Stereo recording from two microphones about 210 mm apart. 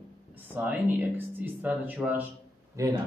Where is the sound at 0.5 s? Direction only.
10° right (ahead or behind).